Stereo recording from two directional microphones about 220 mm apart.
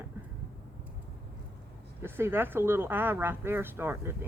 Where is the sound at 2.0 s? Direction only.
10° right (ahead or behind).